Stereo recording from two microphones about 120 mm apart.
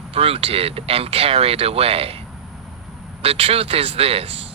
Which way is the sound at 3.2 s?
55° right (ahead or behind).